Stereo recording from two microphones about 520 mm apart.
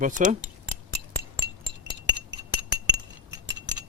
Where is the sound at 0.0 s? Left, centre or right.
Centre.